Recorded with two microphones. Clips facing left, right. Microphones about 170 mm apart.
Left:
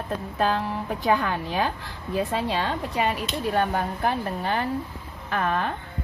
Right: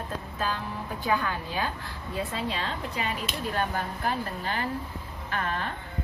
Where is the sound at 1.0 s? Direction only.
90° left.